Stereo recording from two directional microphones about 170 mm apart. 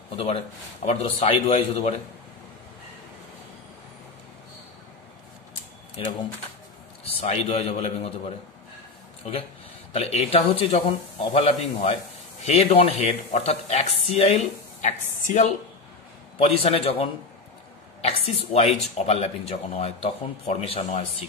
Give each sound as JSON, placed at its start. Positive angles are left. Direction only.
{"t": 0.8, "sound": "speech", "side_deg": 35}
{"t": 7.2, "sound": "speech", "side_deg": 40}
{"t": 9.9, "sound": "speech", "side_deg": 35}